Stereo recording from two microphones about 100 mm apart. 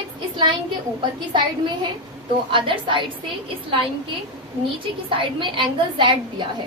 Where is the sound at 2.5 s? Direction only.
60° right (ahead or behind).